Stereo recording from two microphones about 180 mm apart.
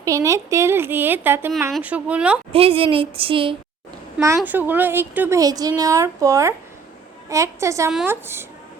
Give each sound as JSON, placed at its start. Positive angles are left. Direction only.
{"t": 0.0, "sound": "speech", "side_deg": -20}
{"t": 2.5, "sound": "a woman's voice", "side_deg": -30}
{"t": 4.4, "sound": "a woman's voice", "side_deg": -10}